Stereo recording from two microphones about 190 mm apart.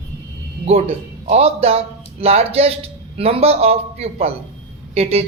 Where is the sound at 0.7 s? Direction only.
35° right (ahead or behind).